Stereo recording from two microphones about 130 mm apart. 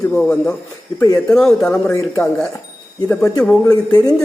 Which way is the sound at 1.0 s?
25° left (ahead or behind).